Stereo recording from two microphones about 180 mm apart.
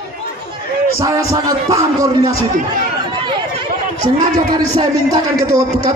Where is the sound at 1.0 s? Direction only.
20° right (ahead or behind).